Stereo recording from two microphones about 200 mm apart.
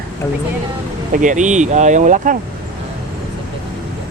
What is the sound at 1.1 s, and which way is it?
Speech, 40° right (ahead or behind).